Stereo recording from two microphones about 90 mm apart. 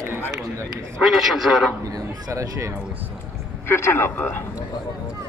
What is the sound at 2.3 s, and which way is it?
Speech, 35° right (ahead or behind).